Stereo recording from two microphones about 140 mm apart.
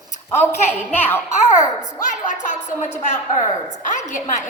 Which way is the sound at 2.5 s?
60° left (ahead or behind).